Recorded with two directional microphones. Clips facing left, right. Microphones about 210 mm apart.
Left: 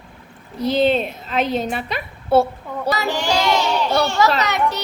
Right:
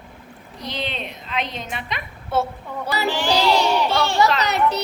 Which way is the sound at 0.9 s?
40° left (ahead or behind).